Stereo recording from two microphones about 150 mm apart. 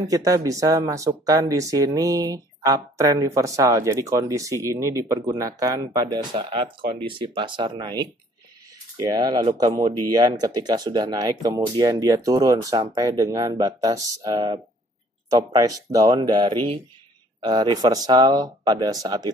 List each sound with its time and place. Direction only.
0.1 s speech: 25° right (ahead or behind)